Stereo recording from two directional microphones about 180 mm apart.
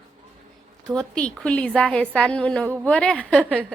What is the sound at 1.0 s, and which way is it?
A woman's voice, 5° left (ahead or behind).